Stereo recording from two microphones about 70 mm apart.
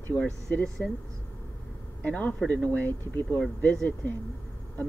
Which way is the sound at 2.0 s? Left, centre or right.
Centre.